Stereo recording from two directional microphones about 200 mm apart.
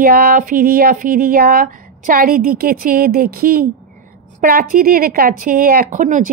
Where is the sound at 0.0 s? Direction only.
50° right (ahead or behind).